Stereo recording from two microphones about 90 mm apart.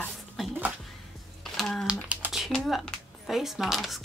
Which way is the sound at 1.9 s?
15° right (ahead or behind).